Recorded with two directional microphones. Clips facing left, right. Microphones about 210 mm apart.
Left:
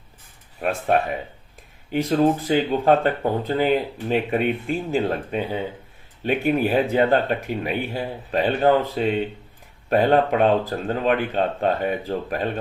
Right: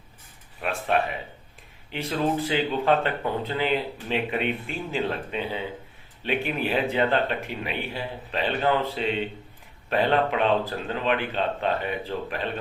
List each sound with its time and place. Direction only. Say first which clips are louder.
0.6 s speech: left 5 dB; 45° left (ahead or behind)
1.9 s speech: left 7 dB; 45° left (ahead or behind)